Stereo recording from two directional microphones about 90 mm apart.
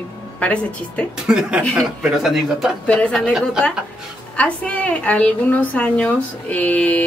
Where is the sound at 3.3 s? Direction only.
5° right (ahead or behind).